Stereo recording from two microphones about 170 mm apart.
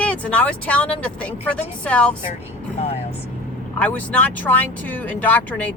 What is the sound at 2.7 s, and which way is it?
Speech, 35° left (ahead or behind).